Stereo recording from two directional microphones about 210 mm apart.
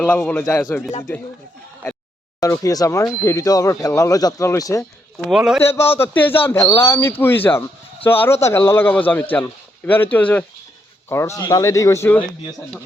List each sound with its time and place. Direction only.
0.0 s speech: 5° left (ahead or behind)
2.4 s speech: 15° left (ahead or behind)
5.2 s a man's voice: 5° right (ahead or behind)
5.6 s speech: 10° left (ahead or behind)